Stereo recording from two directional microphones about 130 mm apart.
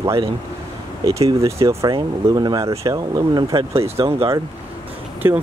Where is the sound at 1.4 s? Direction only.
20° right (ahead or behind); by 4.2 s 45° right (ahead or behind).